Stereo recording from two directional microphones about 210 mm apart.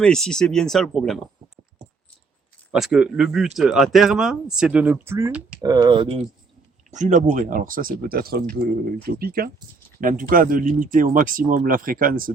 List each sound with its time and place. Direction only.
0.0 s speech: 5° left (ahead or behind)
2.7 s speech: centre (ahead or behind); by 6.2 s 25° right (ahead or behind)
6.9 s speech: 35° right (ahead or behind)